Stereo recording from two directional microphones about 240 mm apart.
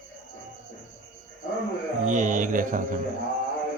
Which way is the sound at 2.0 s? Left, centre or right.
Right.